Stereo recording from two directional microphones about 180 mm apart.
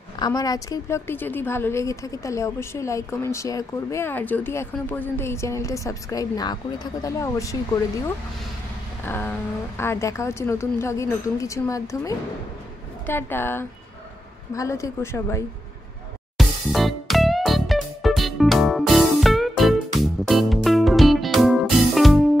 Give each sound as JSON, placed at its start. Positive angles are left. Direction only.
{"t": 0.2, "sound": "a woman's voice", "side_deg": 20}
{"t": 9.0, "sound": "a sound", "side_deg": 10}
{"t": 9.8, "sound": "a woman's voice", "side_deg": 15}
{"t": 16.3, "sound": "music", "side_deg": 0}